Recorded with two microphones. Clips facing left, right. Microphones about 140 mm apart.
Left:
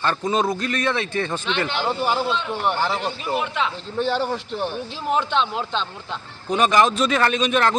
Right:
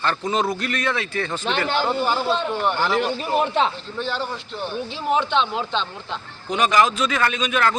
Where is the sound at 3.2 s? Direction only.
40° right (ahead or behind).